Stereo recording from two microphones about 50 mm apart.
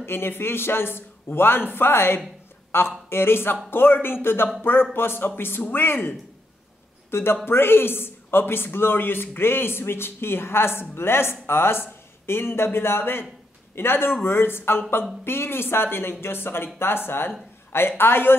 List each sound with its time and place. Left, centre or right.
0.0 s a man's voice: left